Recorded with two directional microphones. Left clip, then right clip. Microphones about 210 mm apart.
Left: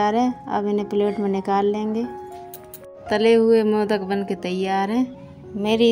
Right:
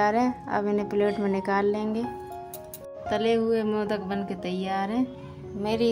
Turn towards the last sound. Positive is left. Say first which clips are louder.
# left 7 dB
turn(degrees=30)  # may be behind; listen again after turning